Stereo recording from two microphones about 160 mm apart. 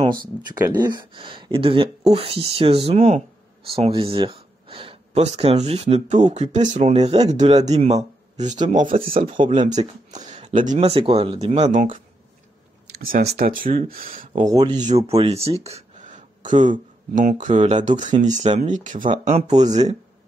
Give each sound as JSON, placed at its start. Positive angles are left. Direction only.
{"t": 0.1, "sound": "speech", "side_deg": -25}
{"t": 13.0, "sound": "speech", "side_deg": -65}
{"t": 14.5, "sound": "speech", "side_deg": -25}
{"t": 15.0, "sound": "speech", "side_deg": -40}